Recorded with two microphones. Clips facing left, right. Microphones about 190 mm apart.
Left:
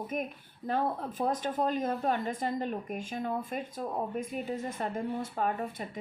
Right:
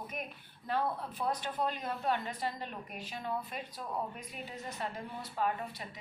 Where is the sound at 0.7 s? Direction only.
45° left (ahead or behind).